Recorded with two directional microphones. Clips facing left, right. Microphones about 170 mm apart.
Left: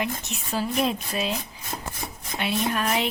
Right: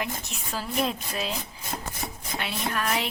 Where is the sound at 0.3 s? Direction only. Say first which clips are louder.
Left 5 dB; 20° left (ahead or behind).